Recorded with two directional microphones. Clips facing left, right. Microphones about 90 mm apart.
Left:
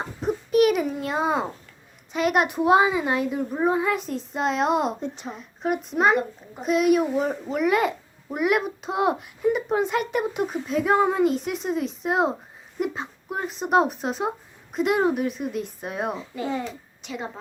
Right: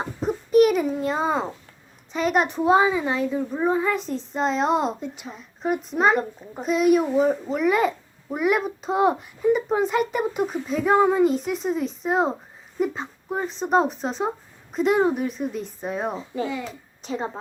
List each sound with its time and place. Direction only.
0.0 s a sound: centre (ahead or behind)
2.1 s a child's voice: 5° left (ahead or behind)
16.1 s a child's voice: 35° right (ahead or behind)